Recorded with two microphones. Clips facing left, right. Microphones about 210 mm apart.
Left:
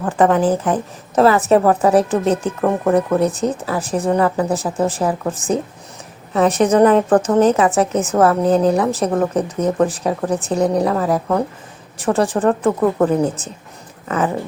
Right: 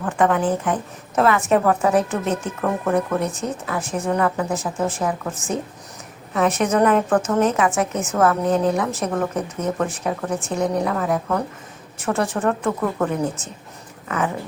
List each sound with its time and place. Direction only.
0.0 s a woman's voice: 35° left (ahead or behind)